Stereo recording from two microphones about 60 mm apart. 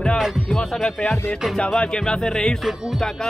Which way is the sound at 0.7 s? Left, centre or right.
Centre.